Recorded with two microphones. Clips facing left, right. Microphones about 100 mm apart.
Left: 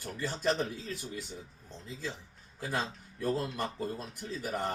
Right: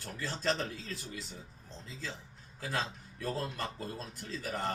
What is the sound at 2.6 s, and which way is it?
Speech, 15° left (ahead or behind).